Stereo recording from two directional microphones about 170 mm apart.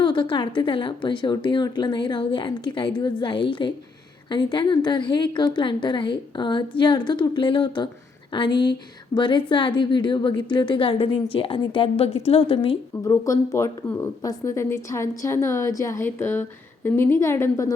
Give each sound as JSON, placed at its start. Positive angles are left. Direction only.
{"t": 0.0, "sound": "a woman's voice", "side_deg": 30}
{"t": 13.2, "sound": "a woman's voice", "side_deg": 20}